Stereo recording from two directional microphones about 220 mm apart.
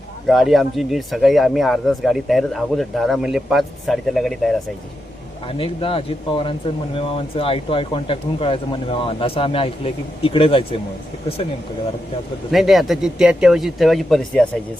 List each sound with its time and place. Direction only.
0.3 s speech: centre (ahead or behind)
5.5 s speech: 25° left (ahead or behind)
12.5 s speech: centre (ahead or behind)